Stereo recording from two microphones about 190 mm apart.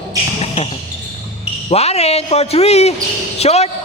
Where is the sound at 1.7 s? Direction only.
35° left (ahead or behind).